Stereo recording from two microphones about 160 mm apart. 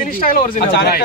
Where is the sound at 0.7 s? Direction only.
80° left.